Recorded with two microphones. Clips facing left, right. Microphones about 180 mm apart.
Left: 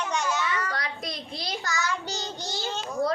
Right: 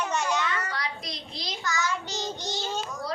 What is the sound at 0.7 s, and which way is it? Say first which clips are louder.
Speech: left 1 dB; 50° left (ahead or behind).